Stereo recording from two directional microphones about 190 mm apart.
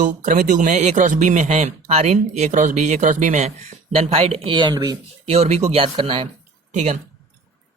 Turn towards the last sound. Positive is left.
turn(degrees=-40)  # may be behind; listen again after turning